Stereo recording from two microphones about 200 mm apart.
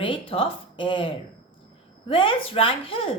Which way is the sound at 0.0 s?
25° left (ahead or behind).